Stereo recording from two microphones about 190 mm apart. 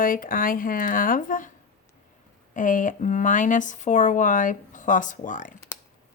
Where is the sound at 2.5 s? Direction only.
45° left (ahead or behind).